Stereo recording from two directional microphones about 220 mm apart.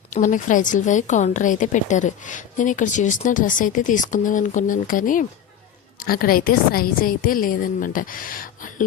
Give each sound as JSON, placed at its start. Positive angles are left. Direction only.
{"t": 0.1, "sound": "a woman's voice", "side_deg": 35}